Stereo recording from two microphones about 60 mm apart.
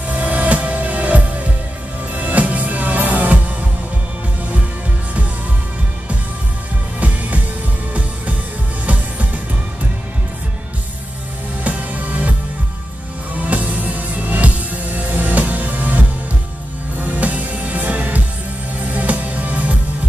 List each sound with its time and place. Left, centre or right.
0.1 s music: right
7.0 s music: right
8.8 s music: right
11.6 s music: right
13.4 s music: right